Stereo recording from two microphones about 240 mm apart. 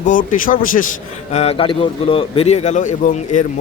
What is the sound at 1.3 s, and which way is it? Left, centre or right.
A man's voice, left.